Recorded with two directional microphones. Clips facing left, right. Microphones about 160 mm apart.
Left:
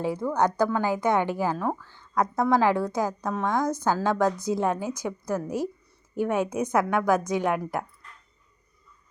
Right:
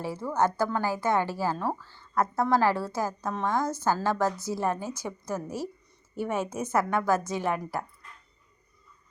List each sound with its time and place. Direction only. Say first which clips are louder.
0.0 s a woman's voice: left 3 dB; 15° left (ahead or behind)
3.2 s a woman's voice: left 2 dB; 5° right (ahead or behind)
3.5 s a woman's voice: left 2 dB; 15° left (ahead or behind)